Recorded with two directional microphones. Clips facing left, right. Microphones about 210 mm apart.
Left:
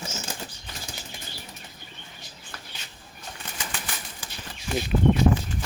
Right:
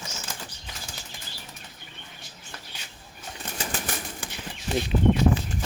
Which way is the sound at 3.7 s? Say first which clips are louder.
Right 5 dB; 45° right (ahead or behind).